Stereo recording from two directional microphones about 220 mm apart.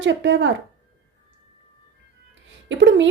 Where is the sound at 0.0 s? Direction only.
55° right (ahead or behind).